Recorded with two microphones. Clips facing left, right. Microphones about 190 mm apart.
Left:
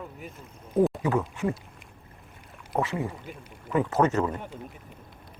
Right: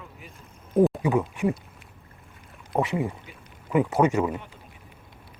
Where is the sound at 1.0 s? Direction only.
15° right (ahead or behind).